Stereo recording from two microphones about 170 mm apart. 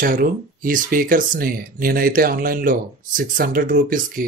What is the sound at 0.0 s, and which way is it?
Speech, 55° right (ahead or behind).